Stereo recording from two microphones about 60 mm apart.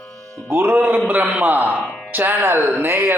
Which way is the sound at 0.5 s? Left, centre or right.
Right.